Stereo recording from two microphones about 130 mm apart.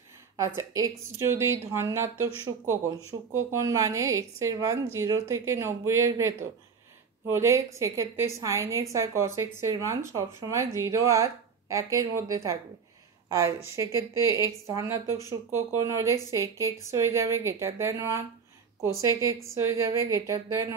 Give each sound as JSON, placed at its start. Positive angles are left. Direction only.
{"t": 0.6, "sound": "speech", "side_deg": -25}